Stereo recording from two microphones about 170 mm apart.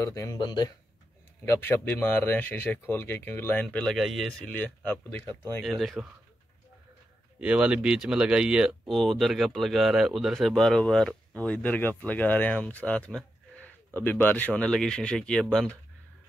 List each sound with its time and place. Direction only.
0.0 s speech: 20° left (ahead or behind)
1.4 s speech: 15° left (ahead or behind)
5.7 s speech: centre (ahead or behind)
7.3 s speech: 5° right (ahead or behind)